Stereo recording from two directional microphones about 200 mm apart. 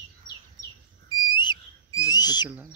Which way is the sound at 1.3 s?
20° left (ahead or behind).